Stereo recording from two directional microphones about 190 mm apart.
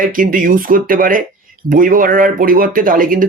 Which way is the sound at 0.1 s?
45° right (ahead or behind).